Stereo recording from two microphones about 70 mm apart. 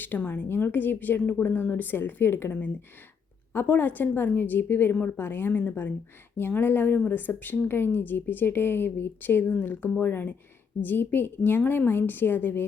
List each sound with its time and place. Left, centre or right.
0.2 s a woman's voice: left